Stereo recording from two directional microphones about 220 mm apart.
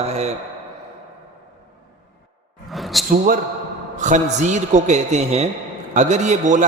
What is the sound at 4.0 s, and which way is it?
A man's voice, 35° right (ahead or behind).